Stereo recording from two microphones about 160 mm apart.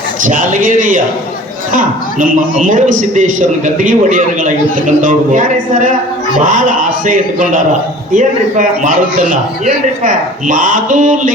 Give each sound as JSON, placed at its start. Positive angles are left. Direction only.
{"t": 0.2, "sound": "a man's voice", "side_deg": -55}